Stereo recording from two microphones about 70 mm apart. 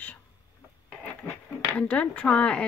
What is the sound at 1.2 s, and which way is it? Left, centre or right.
Speech, centre.